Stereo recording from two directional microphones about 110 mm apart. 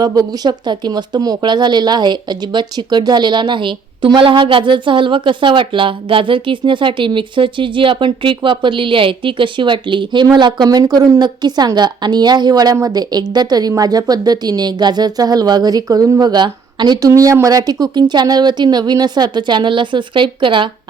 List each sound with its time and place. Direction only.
0.0 s speech: 35° right (ahead or behind)
17.1 s speech: 30° right (ahead or behind); by 20.7 s 50° right (ahead or behind)